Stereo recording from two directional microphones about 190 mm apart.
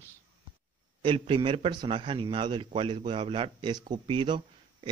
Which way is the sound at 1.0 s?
25° right (ahead or behind).